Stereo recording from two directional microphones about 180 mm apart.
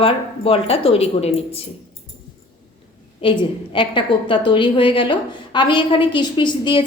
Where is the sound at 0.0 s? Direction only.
30° left (ahead or behind).